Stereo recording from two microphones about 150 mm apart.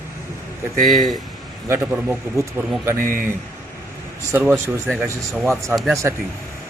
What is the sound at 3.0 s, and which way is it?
Speech, 65° right (ahead or behind).